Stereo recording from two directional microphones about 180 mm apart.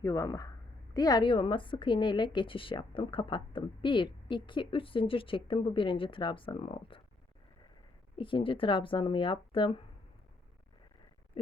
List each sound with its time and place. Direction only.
0.0 s a woman's voice: 20° left (ahead or behind)
8.2 s a woman's voice: 30° left (ahead or behind)